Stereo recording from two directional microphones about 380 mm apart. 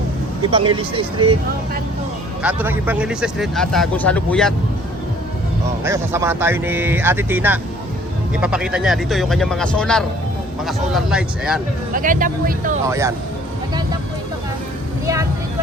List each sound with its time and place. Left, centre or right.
0.5 s speech: centre
2.4 s speech: centre
5.8 s speech: centre
11.9 s speech: right
12.9 s speech: centre
15.0 s vehicle: centre